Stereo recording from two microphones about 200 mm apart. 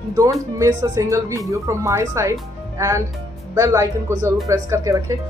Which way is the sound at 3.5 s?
15° right (ahead or behind).